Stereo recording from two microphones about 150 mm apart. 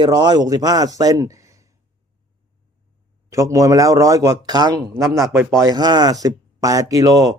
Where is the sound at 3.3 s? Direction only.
20° right (ahead or behind).